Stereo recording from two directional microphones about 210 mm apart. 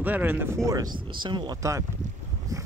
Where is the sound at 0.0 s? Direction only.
10° right (ahead or behind).